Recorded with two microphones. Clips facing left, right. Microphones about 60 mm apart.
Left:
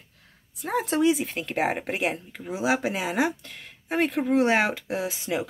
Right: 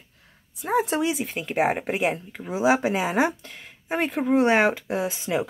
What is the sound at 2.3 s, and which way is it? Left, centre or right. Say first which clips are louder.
Speech: right 6 dB; centre.